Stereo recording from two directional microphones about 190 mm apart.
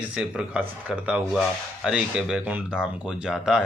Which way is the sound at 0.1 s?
5° right (ahead or behind).